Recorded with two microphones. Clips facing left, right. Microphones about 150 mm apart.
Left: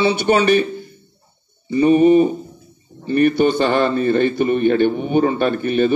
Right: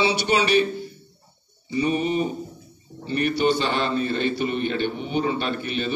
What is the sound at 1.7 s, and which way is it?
A man's voice, 50° left (ahead or behind).